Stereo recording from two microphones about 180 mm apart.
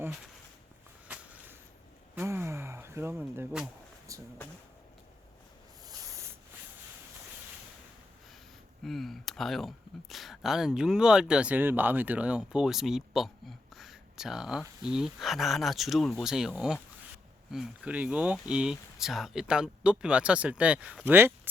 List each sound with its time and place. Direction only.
1.0 s a sound: 10° right (ahead or behind)
2.1 s speech: 15° right (ahead or behind)
5.8 s snake: 15° right (ahead or behind)
8.8 s speech: centre (ahead or behind)